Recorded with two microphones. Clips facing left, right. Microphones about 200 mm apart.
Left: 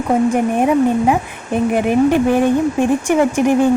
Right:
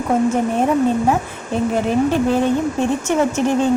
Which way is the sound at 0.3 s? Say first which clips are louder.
Left 3 dB; 15° left (ahead or behind).